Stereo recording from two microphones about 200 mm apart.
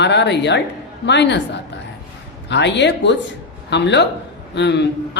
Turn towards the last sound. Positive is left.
turn(degrees=60)  # may be behind; listen again after turning